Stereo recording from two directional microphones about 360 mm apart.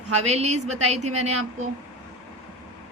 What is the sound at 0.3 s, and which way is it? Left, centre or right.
A woman's voice, centre.